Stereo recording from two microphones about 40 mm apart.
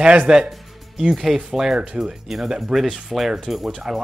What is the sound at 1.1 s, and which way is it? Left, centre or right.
Speech, centre.